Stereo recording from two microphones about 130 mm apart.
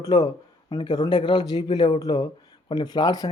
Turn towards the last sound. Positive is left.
turn(degrees=30)  # may be behind; listen again after turning